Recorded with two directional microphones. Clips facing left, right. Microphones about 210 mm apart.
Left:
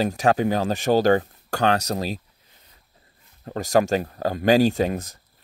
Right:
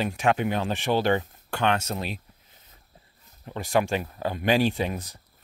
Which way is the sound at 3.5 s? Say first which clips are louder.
Left 5 dB; 40° left (ahead or behind).